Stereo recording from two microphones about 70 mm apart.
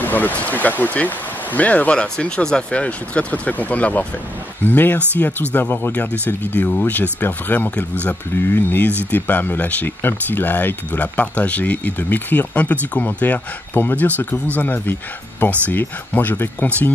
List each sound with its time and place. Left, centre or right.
0.0 s speech: left